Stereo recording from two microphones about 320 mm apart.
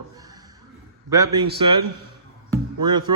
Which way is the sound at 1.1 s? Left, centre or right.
Centre.